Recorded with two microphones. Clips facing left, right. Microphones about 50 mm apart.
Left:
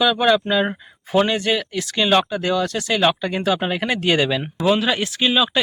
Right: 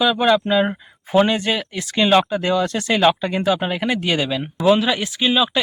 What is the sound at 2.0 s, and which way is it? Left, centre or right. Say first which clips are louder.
Speech: right 2 dB; centre.